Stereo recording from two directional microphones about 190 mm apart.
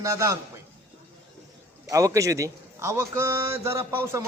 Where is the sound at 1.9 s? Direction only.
15° right (ahead or behind).